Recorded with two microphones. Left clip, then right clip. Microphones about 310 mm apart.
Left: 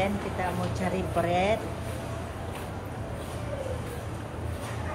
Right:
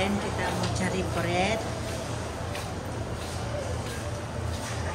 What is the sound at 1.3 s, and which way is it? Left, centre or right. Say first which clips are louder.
Speech: left 1 dB; centre.